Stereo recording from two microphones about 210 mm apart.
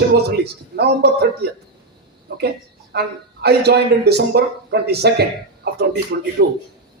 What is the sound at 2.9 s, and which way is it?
Speech, 50° right (ahead or behind).